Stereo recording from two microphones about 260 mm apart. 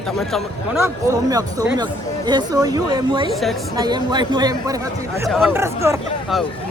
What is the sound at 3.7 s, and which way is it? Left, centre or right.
Speech, centre.